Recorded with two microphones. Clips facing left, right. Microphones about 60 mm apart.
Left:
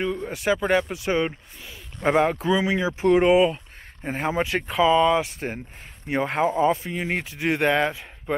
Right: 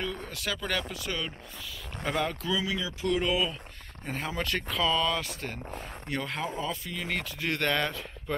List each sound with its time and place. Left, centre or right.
0.0 s speech: left
4.4 s speech: centre; by 7.2 s left
7.2 s speech: centre